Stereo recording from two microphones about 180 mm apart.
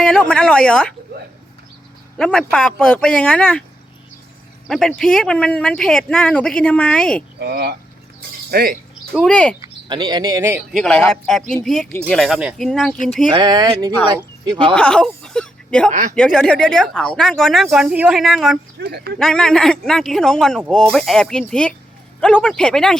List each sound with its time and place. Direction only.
0.0 s speech: 5° left (ahead or behind)
2.1 s speech: 5° left (ahead or behind)
4.7 s speech: centre (ahead or behind)
7.3 s speech: 60° right (ahead or behind)
9.1 s speech: 5° left (ahead or behind)
9.6 s speech: 25° right (ahead or behind)
10.8 s speech: 5° left (ahead or behind)
13.3 s speech: 25° right (ahead or behind)
14.8 s speech: 5° left (ahead or behind)
15.9 s speech: 45° right (ahead or behind)
16.1 s speech: 5° left (ahead or behind)
18.8 s speech: 65° right (ahead or behind)
19.2 s speech: 5° left (ahead or behind)